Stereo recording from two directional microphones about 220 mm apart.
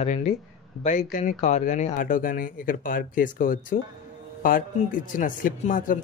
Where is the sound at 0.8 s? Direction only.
35° left (ahead or behind).